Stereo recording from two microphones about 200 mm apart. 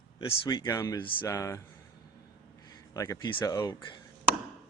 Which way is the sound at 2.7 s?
15° left (ahead or behind).